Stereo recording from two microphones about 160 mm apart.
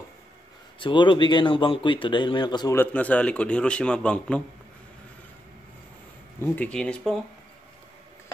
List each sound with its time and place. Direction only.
0.7 s a man's voice: 30° left (ahead or behind)
2.8 s a man's voice: 10° left (ahead or behind)
6.4 s a man's voice: 10° left (ahead or behind)